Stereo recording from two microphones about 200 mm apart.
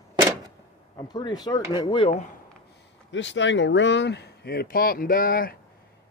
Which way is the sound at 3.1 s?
65° left (ahead or behind).